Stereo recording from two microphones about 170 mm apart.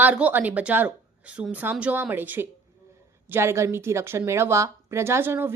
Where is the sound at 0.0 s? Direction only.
10° right (ahead or behind).